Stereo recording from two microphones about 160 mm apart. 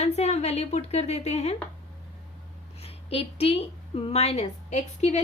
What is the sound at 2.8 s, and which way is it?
A woman's voice, 40° left (ahead or behind).